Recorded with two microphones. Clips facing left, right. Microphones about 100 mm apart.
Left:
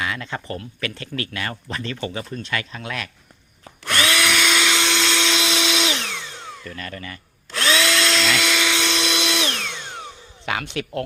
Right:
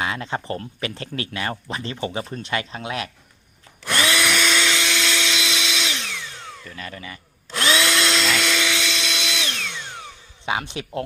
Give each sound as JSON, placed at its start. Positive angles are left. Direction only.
{"t": 0.0, "sound": "speech", "side_deg": -30}
{"t": 3.8, "sound": "drill", "side_deg": 0}
{"t": 4.5, "sound": "vacuum cleaner", "side_deg": 20}
{"t": 5.7, "sound": "tools", "side_deg": 70}
{"t": 6.6, "sound": "drill", "side_deg": -10}
{"t": 8.2, "sound": "dental drill", "side_deg": 0}
{"t": 9.0, "sound": "drill", "side_deg": 60}
{"t": 9.6, "sound": "a sound", "side_deg": 25}
{"t": 10.4, "sound": "speech", "side_deg": -25}